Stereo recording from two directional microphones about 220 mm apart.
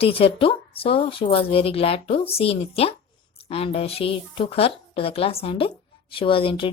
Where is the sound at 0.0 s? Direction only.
25° left (ahead or behind).